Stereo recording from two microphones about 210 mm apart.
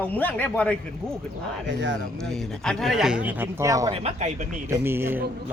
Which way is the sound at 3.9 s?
30° right (ahead or behind).